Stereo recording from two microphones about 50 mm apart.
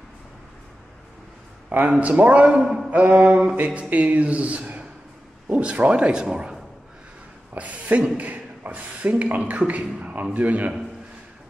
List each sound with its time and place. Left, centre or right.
1.9 s a man's voice: right
7.5 s a man's voice: right